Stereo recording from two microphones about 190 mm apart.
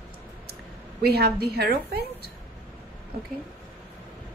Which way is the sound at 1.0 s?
55° right (ahead or behind).